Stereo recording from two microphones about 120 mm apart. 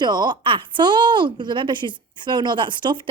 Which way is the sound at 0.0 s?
35° right (ahead or behind).